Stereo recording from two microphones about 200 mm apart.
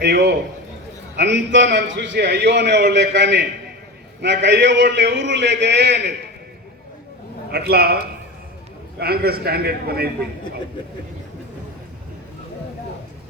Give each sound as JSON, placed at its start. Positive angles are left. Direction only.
{"t": 0.0, "sound": "a man's voice", "side_deg": -55}
{"t": 7.5, "sound": "a man's voice", "side_deg": -50}
{"t": 9.0, "sound": "a man's voice", "side_deg": -50}